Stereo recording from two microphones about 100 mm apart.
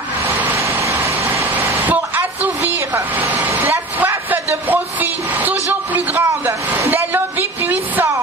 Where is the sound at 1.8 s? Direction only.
15° right (ahead or behind).